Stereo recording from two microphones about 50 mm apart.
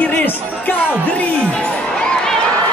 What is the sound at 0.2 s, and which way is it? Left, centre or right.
Music, left.